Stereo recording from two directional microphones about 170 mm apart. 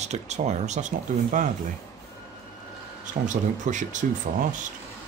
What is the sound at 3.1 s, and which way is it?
Speech, 45° right (ahead or behind).